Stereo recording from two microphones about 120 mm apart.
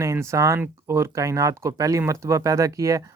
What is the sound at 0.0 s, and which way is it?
Speech, 25° right (ahead or behind).